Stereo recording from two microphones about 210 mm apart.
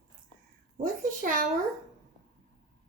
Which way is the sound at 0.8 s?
40° right (ahead or behind).